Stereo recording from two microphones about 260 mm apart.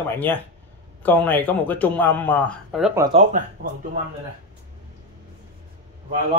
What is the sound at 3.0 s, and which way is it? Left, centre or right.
Speech, right.